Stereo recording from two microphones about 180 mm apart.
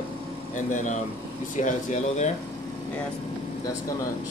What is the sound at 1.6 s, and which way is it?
Speech, 40° left (ahead or behind).